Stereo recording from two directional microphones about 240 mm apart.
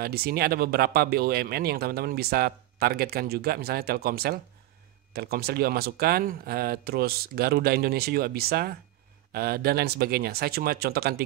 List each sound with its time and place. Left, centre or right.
0.0 s speech: right